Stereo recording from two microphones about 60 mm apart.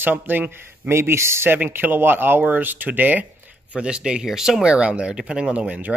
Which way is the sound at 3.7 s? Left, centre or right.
Centre.